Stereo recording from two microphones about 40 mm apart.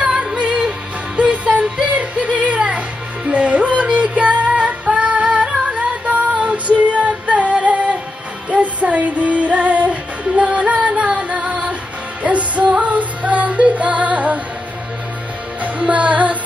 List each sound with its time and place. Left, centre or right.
0.0 s music: right
15.6 s music: right